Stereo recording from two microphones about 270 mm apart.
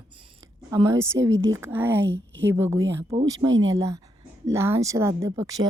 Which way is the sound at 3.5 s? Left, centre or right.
Right.